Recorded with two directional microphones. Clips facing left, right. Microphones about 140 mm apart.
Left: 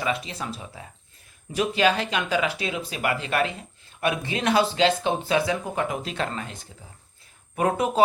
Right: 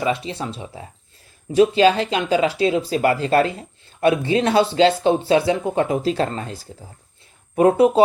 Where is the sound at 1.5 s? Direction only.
30° right (ahead or behind).